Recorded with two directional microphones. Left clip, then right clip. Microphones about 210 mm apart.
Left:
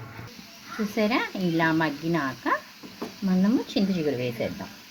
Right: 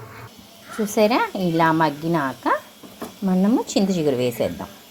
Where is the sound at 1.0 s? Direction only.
20° right (ahead or behind).